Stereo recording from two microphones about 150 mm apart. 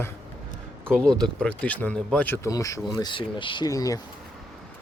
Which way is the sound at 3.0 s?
35° left (ahead or behind).